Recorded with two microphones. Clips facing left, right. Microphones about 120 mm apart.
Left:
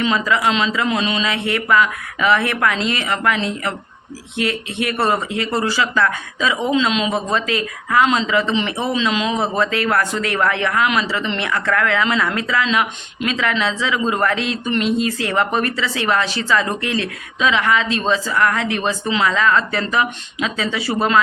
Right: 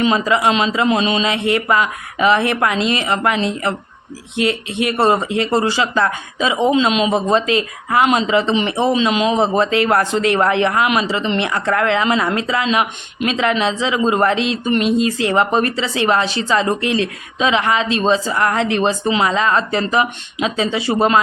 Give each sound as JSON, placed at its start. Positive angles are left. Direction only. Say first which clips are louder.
{"t": 0.0, "sound": "speech", "louder": "right 3 dB", "side_deg": -20}